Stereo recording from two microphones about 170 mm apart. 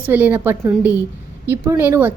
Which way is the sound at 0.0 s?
10° right (ahead or behind).